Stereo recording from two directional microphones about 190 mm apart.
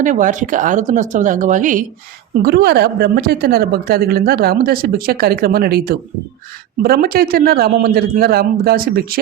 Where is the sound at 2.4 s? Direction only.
55° right (ahead or behind).